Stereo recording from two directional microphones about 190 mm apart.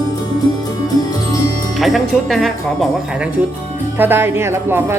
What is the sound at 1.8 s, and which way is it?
Speech, centre (ahead or behind).